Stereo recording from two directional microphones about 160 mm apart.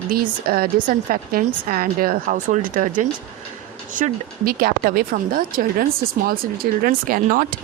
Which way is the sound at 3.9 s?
60° right (ahead or behind).